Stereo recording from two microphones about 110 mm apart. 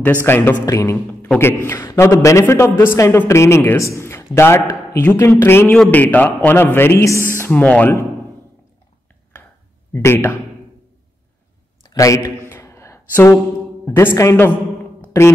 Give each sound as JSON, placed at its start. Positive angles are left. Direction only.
{"t": 0.0, "sound": "a man's voice", "side_deg": 20}
{"t": 0.7, "sound": "a man's voice", "side_deg": 30}
{"t": 9.9, "sound": "speech", "side_deg": 20}
{"t": 11.9, "sound": "a sound", "side_deg": 30}
{"t": 14.1, "sound": "speech", "side_deg": 25}